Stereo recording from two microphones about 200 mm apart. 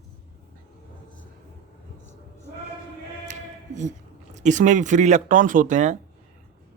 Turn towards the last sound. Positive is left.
turn(degrees=-40)  # may be behind; listen again after turning